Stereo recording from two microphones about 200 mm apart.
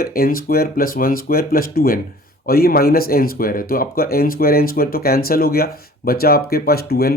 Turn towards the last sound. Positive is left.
turn(degrees=50)  # may be behind; listen again after turning